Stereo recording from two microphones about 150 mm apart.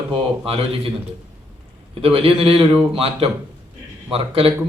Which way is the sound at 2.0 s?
40° right (ahead or behind).